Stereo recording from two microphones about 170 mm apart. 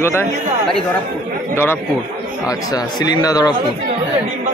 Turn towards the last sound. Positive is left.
turn(degrees=20)  # may be behind; listen again after turning